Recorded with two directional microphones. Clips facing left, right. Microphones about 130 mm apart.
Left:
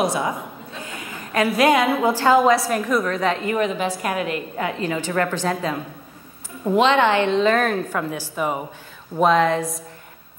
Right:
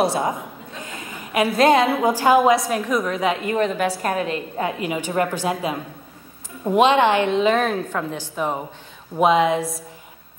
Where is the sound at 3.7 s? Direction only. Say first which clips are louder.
Right 2 dB; 55° right (ahead or behind).